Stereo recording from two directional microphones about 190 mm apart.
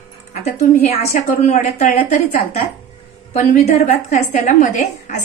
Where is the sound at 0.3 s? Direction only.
40° left (ahead or behind).